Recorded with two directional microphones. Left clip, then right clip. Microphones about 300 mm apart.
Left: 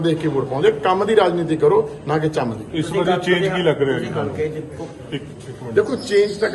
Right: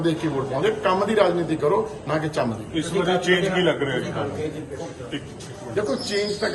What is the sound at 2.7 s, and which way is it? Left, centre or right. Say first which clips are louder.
A man's voice: left 4 dB; left.